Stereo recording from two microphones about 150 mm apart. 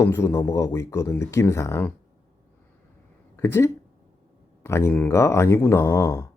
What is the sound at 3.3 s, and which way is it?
Speech, 15° left (ahead or behind).